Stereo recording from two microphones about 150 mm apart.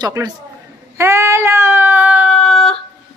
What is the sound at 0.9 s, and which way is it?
Child singing, 20° right (ahead or behind).